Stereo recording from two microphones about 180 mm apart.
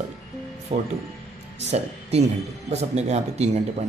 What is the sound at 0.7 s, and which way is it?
Speech, 40° right (ahead or behind).